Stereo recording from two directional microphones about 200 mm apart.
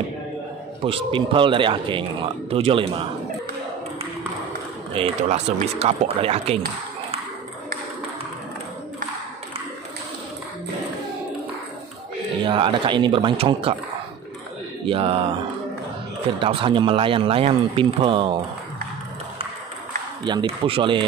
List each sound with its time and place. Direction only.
0.8 s speech: 25° right (ahead or behind)
4.9 s speech: 30° right (ahead or behind)
12.4 s speech: 25° right (ahead or behind)
14.9 s speech: 25° right (ahead or behind)
16.3 s speech: 25° right (ahead or behind)
20.2 s speech: 25° right (ahead or behind)